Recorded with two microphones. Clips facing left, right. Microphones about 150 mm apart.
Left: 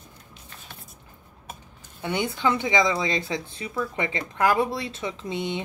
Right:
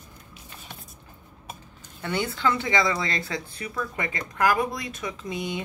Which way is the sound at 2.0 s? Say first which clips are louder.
Left 1 dB; 20° left (ahead or behind).